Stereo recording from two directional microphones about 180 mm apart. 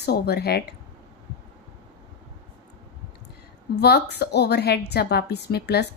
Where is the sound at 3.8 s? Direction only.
65° left (ahead or behind).